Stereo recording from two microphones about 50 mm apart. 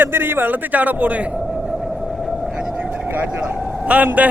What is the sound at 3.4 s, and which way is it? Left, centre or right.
Speech, right.